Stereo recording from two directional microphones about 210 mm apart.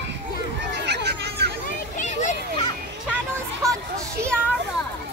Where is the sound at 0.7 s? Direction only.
55° right (ahead or behind).